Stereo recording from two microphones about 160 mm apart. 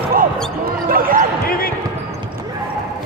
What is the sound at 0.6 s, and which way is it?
Basketball bounce, 65° right (ahead or behind).